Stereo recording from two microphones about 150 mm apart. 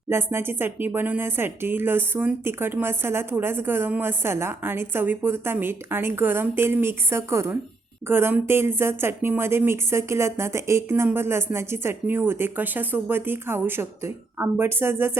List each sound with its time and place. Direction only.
0.1 s speech: 15° right (ahead or behind)